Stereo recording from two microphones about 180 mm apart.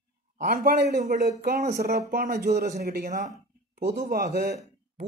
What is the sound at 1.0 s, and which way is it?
Speech, 45° right (ahead or behind).